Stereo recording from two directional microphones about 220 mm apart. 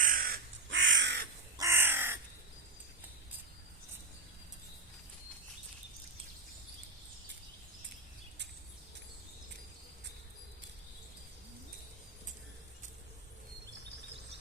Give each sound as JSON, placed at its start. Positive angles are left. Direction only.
{"t": 0.0, "sound": "crow", "side_deg": -40}
{"t": 0.7, "sound": "crow", "side_deg": -60}
{"t": 1.5, "sound": "crow", "side_deg": -10}